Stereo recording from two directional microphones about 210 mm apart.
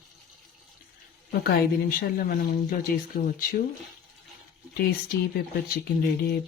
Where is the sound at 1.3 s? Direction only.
50° left (ahead or behind).